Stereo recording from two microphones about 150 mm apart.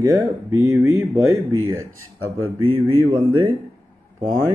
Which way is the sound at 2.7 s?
20° right (ahead or behind).